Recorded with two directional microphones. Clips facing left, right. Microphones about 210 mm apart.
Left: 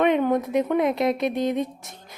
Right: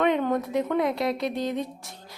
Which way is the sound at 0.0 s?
20° left (ahead or behind).